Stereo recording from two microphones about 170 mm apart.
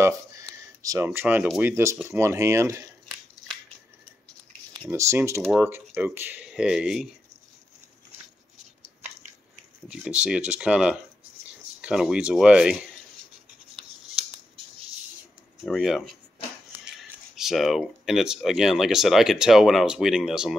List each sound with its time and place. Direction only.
0.0 s speech: 15° right (ahead or behind)
4.8 s speech: 15° right (ahead or behind)
9.8 s speech: 5° right (ahead or behind)
15.6 s speech: centre (ahead or behind)
17.4 s speech: centre (ahead or behind)